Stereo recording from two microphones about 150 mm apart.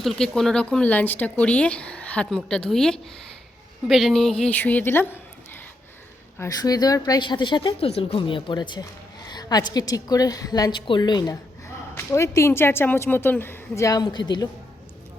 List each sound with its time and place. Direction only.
0.0 s speech: centre (ahead or behind)
6.4 s a woman's voice: 25° left (ahead or behind)